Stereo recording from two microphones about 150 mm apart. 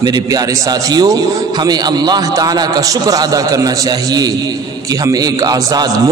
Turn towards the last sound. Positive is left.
turn(degrees=-25)  # may be behind; listen again after turning